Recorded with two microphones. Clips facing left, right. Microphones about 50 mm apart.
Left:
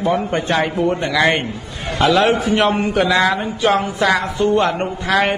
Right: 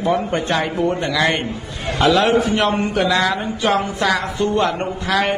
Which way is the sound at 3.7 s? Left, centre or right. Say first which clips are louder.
Left 2 dB; centre.